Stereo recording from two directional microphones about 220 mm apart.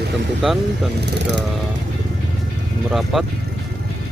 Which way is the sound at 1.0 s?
50° right (ahead or behind).